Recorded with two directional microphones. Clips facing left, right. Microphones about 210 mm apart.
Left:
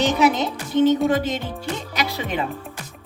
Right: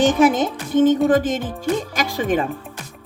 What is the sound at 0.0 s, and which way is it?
A woman's voice, 50° right (ahead or behind).